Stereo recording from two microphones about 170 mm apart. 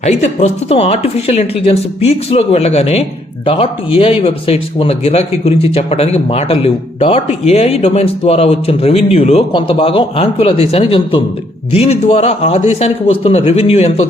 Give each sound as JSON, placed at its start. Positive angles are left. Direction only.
{"t": 0.0, "sound": "speech", "side_deg": 40}